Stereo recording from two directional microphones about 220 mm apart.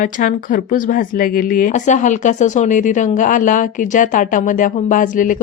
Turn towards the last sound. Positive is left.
turn(degrees=35)  # may be behind; listen again after turning